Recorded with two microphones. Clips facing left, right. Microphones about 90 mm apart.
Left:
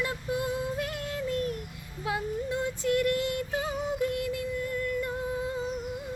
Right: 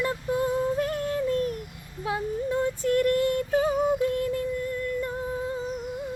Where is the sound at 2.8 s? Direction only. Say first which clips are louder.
Right 3 dB; 40° right (ahead or behind).